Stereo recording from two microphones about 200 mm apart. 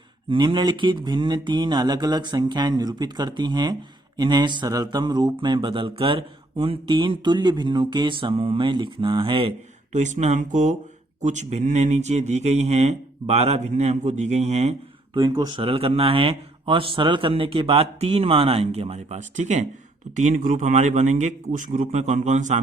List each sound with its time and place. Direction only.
0.3 s speech: 25° right (ahead or behind)
9.9 s speech: 35° right (ahead or behind)
15.2 s speech: 20° right (ahead or behind); by 22.6 s 35° right (ahead or behind)